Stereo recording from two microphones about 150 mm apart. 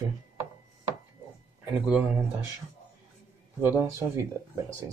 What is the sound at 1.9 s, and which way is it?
Speech, 10° right (ahead or behind).